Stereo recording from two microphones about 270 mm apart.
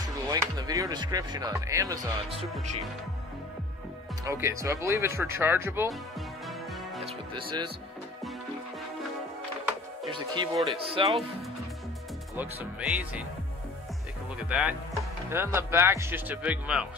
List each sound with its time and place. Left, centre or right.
0.3 s speech: centre
4.2 s speech: centre
7.3 s speech: centre
10.0 s speech: centre
12.4 s speech: centre
14.5 s speech: centre